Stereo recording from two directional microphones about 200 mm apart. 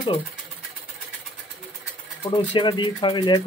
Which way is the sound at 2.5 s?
25° left (ahead or behind).